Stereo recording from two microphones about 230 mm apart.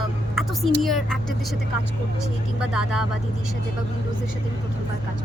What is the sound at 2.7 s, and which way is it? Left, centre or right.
Speech, centre.